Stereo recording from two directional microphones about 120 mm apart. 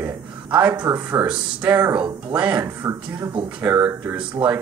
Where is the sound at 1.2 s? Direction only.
10° right (ahead or behind).